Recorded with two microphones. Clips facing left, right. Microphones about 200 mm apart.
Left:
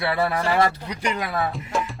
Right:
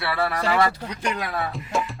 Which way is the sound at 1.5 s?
Centre (ahead or behind).